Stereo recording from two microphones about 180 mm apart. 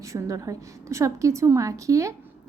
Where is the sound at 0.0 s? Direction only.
15° right (ahead or behind).